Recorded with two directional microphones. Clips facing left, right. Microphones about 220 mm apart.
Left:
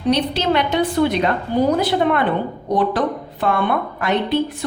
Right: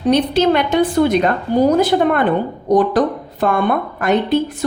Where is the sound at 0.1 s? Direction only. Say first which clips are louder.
Right 4 dB; 50° right (ahead or behind).